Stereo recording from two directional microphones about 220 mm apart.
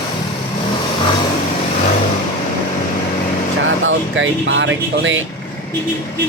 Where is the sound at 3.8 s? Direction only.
60° right (ahead or behind).